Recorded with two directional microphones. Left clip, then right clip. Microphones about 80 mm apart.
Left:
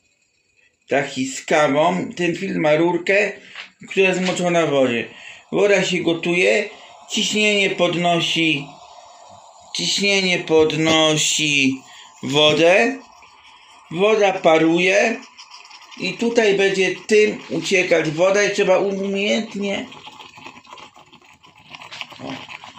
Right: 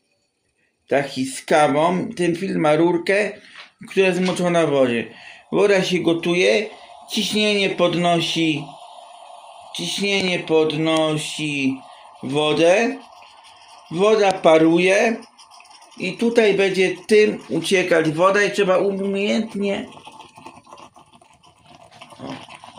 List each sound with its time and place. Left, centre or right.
0.9 s speech: centre
9.7 s speech: centre
10.4 s speech: centre
10.8 s speech: centre
14.1 s speech: centre
16.0 s speech: centre
17.6 s speech: right
18.3 s speech: centre
19.5 s speech: right
19.9 s a sound: right
22.2 s dog: right